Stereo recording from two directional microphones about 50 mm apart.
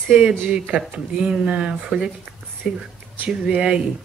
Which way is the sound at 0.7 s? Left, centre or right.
Right.